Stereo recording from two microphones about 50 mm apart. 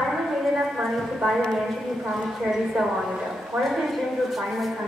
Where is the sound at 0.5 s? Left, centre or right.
Centre.